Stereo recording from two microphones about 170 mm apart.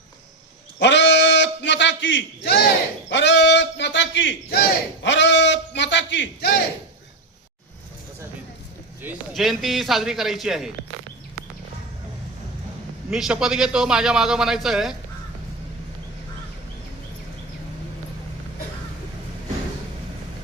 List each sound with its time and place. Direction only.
0.8 s a sound: 90° left
3.1 s a man's voice: 90° left
9.3 s a man's voice: centre (ahead or behind)
13.1 s a man's voice: 5° right (ahead or behind)